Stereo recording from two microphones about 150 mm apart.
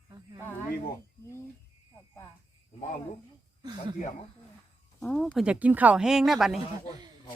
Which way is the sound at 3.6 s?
30° right (ahead or behind).